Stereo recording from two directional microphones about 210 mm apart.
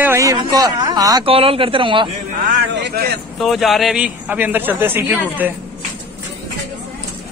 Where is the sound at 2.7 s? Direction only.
50° right (ahead or behind).